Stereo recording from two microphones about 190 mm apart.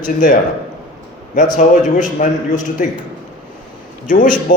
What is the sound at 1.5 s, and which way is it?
A man's voice, 40° left (ahead or behind).